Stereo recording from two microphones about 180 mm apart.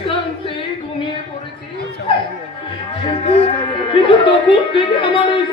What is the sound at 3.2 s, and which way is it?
Speech, 30° left (ahead or behind).